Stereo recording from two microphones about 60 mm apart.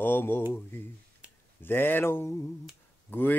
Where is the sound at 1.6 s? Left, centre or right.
Left.